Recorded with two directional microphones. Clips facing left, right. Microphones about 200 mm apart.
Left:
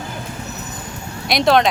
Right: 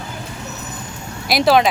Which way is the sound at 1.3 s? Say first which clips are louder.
Right 1 dB; 5° right (ahead or behind).